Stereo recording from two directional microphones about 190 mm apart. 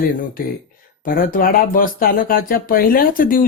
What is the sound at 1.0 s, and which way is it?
Speech, 50° left (ahead or behind).